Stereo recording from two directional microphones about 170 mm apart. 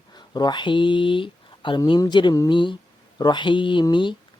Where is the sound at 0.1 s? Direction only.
25° left (ahead or behind).